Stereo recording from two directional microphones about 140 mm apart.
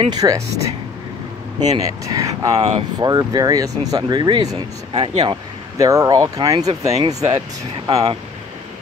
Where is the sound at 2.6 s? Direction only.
50° right (ahead or behind).